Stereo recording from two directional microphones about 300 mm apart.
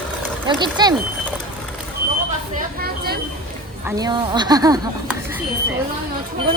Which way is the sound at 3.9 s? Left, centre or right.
Centre.